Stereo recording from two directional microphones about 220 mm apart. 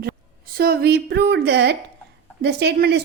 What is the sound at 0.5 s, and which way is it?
A woman's voice, 45° right (ahead or behind).